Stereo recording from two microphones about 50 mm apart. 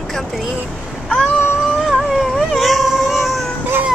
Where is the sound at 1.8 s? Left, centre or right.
Centre.